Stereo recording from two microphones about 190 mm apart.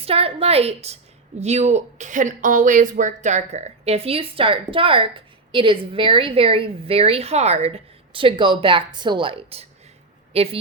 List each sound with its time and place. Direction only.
0.0 s speech: 30° right (ahead or behind)